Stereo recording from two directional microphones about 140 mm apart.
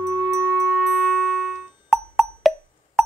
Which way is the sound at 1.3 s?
Centre (ahead or behind).